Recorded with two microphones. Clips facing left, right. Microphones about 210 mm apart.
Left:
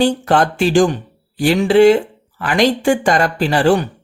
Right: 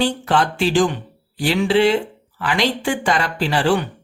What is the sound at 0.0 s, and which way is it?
Speech, 45° left (ahead or behind).